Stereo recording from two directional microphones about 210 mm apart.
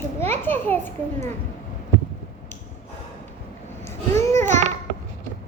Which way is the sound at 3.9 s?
10° left (ahead or behind).